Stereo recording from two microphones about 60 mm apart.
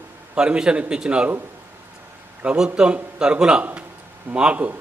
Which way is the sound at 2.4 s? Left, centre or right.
Centre.